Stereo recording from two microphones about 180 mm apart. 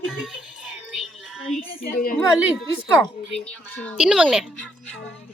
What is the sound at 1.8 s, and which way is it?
Speech, 50° left (ahead or behind).